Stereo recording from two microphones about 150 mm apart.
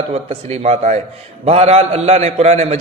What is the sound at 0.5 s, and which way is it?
A man's voice, 45° right (ahead or behind).